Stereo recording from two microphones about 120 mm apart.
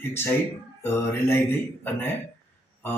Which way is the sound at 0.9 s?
20° left (ahead or behind).